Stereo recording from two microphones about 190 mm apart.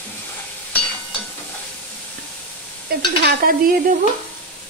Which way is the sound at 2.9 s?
55° right (ahead or behind).